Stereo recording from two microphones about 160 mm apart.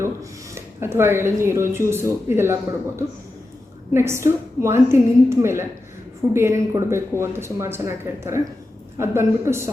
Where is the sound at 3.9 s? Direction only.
15° right (ahead or behind).